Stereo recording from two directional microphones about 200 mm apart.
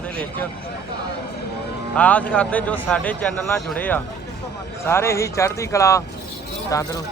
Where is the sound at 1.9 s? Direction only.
5° left (ahead or behind).